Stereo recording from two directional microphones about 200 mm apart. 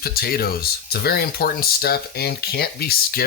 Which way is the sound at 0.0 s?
50° left (ahead or behind).